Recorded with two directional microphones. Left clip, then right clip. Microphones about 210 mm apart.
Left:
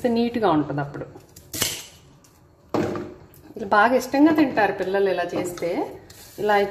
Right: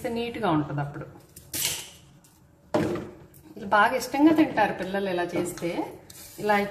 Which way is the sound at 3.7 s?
25° left (ahead or behind).